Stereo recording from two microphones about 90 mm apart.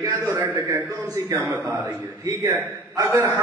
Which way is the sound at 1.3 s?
25° right (ahead or behind).